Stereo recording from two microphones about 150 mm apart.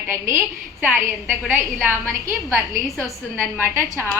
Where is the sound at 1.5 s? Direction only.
10° right (ahead or behind).